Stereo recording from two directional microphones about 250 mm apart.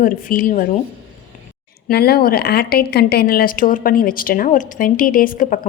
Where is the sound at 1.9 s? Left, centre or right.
Left.